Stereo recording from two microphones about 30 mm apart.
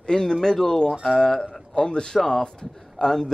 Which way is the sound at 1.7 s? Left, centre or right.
Left.